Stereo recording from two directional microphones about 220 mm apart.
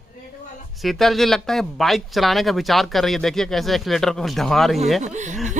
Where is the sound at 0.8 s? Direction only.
Centre (ahead or behind).